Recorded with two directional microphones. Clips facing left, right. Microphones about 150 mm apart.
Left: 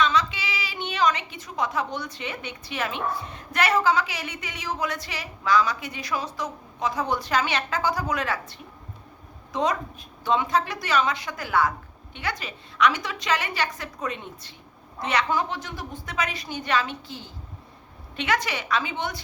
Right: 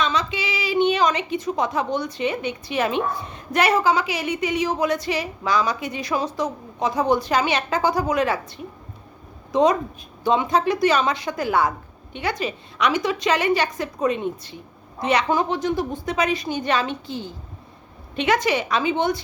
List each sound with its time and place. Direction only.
0.0 s a woman's voice: 20° right (ahead or behind)